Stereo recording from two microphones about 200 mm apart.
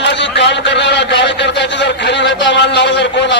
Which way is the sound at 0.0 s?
60° left (ahead or behind).